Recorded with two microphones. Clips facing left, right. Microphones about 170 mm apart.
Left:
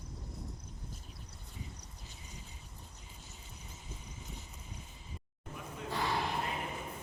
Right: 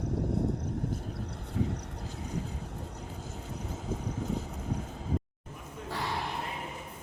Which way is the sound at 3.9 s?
85° right.